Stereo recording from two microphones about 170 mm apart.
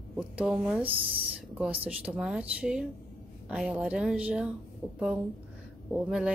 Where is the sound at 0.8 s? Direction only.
30° right (ahead or behind).